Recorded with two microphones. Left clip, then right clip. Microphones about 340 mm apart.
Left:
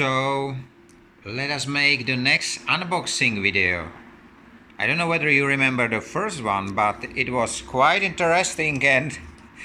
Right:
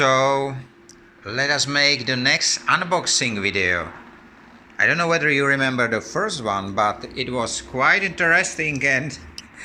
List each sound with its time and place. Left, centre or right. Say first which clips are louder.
0.0 s speech: right 5 dB; centre
6.0 s speech: right 2 dB; centre